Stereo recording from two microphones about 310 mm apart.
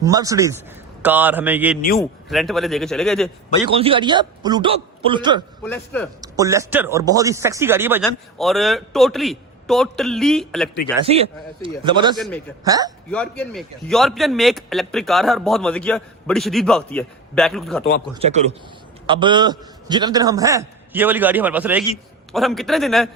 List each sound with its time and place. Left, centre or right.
0.0 s a man's voice: centre
3.7 s a man's voice: centre
5.6 s a man's voice: centre
6.2 s a man's voice: centre
11.1 s a man's voice: centre
12.1 s a man's voice: centre
12.6 s a man's voice: centre
13.1 s a man's voice: centre
18.1 s a man's voice: centre